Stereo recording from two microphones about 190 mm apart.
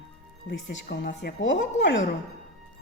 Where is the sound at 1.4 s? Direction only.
70° left (ahead or behind).